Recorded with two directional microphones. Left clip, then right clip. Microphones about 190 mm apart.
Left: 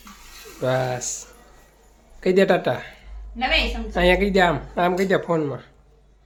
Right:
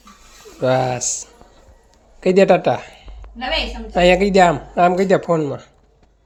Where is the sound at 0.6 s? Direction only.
25° right (ahead or behind).